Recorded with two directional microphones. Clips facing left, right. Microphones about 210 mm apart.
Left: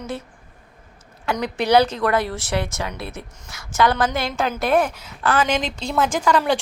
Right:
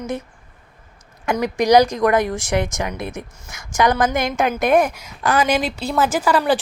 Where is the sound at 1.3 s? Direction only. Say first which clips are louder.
Right 3 dB; 10° right (ahead or behind).